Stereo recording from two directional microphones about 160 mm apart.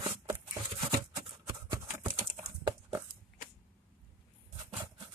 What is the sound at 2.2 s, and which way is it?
Computer keyboard, 25° right (ahead or behind).